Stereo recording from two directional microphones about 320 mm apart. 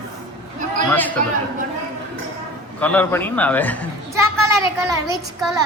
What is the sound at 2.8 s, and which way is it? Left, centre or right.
A man's voice, centre.